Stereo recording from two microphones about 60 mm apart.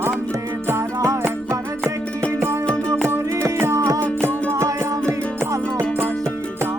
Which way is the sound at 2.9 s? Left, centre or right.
Right.